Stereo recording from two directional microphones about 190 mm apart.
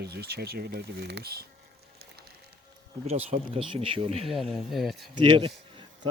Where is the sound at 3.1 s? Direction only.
35° right (ahead or behind).